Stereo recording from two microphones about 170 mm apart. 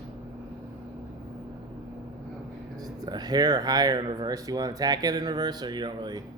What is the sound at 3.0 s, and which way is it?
Speech, 25° right (ahead or behind).